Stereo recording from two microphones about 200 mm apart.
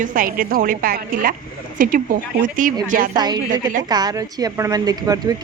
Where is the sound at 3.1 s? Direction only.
20° right (ahead or behind).